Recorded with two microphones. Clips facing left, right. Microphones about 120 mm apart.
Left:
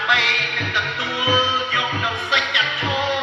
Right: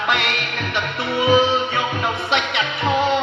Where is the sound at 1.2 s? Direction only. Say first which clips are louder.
Right 5 dB; 25° right (ahead or behind).